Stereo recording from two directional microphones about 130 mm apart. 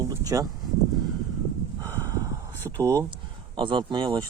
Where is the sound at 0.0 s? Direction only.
25° right (ahead or behind).